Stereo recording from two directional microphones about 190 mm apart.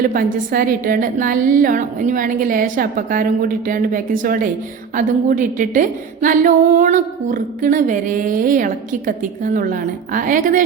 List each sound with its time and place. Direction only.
0.0 s a woman's voice: 45° right (ahead or behind)